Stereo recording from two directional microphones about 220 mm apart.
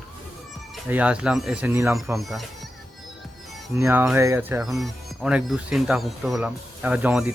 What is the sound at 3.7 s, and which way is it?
Speech, 10° right (ahead or behind).